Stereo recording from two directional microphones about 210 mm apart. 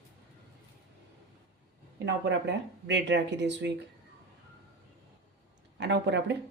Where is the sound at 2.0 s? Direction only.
55° right (ahead or behind).